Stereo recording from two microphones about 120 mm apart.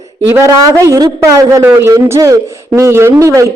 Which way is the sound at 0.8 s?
25° right (ahead or behind).